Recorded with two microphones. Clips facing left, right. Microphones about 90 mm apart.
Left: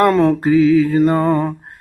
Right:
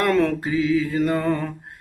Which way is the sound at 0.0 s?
30° left (ahead or behind).